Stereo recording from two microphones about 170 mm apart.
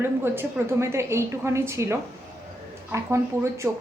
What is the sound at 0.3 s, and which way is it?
A woman's voice, 15° right (ahead or behind).